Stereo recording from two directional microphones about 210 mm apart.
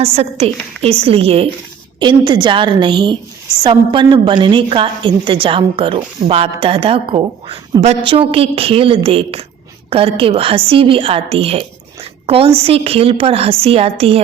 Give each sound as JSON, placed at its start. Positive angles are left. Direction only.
{"t": 0.0, "sound": "a woman's voice", "side_deg": -30}